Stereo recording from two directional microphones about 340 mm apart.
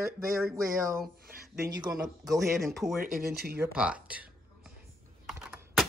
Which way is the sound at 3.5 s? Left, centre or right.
Centre.